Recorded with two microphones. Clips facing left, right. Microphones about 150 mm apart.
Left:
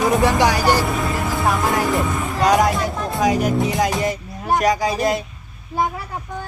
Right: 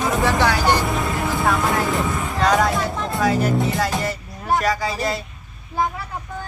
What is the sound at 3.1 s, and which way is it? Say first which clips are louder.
Speech: left 1 dB; 20° left (ahead or behind).